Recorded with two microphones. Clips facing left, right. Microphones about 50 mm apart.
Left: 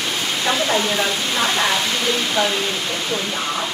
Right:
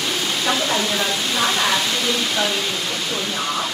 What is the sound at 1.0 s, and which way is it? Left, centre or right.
Speech, centre.